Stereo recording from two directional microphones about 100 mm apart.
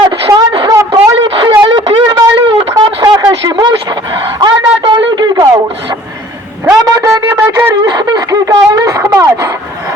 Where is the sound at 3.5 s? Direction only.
50° right (ahead or behind).